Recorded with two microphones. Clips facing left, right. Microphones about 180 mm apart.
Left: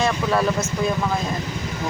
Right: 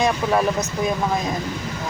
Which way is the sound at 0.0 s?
15° right (ahead or behind).